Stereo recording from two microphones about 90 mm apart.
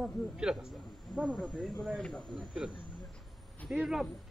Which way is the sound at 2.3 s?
5° right (ahead or behind).